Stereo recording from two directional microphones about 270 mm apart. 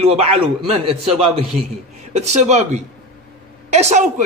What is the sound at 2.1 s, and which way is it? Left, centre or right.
A man's voice, right.